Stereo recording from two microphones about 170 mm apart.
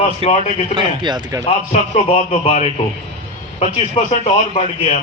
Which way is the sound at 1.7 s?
35° left (ahead or behind).